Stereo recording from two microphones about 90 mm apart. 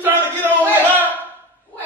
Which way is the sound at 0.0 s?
20° right (ahead or behind).